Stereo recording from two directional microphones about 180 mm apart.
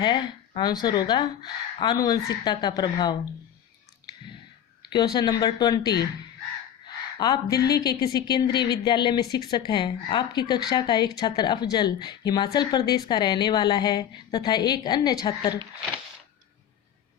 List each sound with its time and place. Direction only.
0.0 s speech: 25° left (ahead or behind)
4.8 s speech: 25° left (ahead or behind)
7.2 s speech: 20° left (ahead or behind)